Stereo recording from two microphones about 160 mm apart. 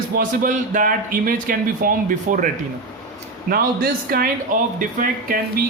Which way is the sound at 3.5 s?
65° right (ahead or behind).